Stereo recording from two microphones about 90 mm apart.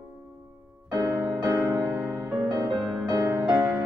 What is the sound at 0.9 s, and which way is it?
Music, 40° right (ahead or behind).